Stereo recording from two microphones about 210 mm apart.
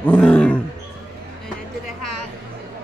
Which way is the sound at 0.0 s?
5° left (ahead or behind).